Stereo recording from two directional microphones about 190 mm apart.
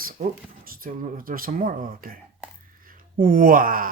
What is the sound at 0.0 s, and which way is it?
Speech, 50° right (ahead or behind).